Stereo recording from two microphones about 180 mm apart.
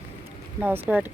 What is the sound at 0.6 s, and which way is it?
Speech, 10° right (ahead or behind).